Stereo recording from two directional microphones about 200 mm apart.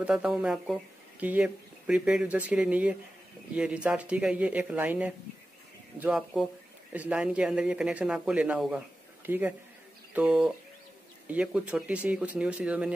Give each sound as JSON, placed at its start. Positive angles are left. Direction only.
{"t": 0.0, "sound": "speech", "side_deg": -5}